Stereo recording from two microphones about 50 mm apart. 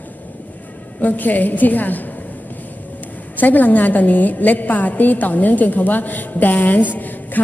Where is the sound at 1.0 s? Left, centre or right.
Left.